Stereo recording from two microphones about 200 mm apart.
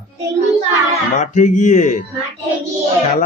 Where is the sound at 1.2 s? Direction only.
40° left (ahead or behind).